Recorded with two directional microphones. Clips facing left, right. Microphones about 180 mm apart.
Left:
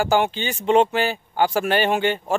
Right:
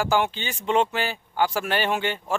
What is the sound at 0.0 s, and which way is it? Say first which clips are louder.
Speech: left 3 dB; 55° left (ahead or behind).